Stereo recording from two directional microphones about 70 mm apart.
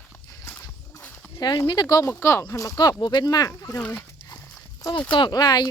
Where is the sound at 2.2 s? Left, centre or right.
Left.